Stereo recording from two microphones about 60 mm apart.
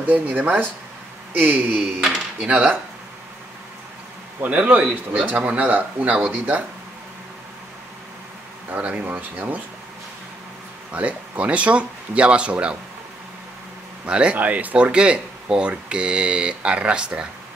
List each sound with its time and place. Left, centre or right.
0.0 s speech: right
2.0 s speech: centre
2.4 s speech: centre
4.5 s speech: centre
8.6 s speech: right
10.9 s speech: right
14.0 s speech: centre